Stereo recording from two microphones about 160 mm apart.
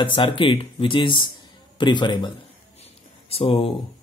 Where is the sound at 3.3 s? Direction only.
35° left (ahead or behind).